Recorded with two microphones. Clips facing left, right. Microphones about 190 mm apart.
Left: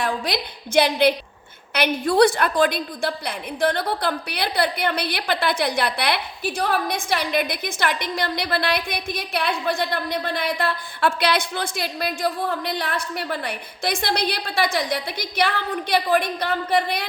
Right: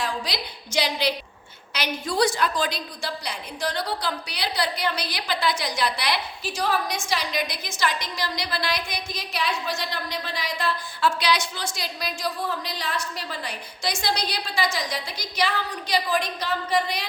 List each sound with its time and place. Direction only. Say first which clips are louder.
0.0 s a woman's voice: left 5 dB; 55° left (ahead or behind)